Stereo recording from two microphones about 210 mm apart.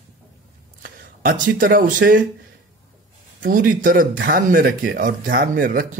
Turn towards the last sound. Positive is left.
turn(degrees=-45)  # may be behind; listen again after turning